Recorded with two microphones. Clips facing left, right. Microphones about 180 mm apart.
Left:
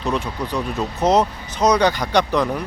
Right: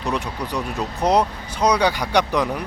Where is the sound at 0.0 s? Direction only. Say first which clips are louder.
Left 2 dB; 15° right (ahead or behind).